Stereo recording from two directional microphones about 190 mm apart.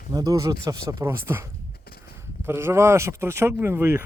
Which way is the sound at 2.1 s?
10° right (ahead or behind).